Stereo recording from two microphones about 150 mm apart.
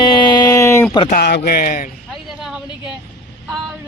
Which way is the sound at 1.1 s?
90° left.